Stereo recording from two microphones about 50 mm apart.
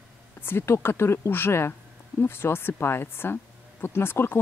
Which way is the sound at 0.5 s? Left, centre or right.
Left.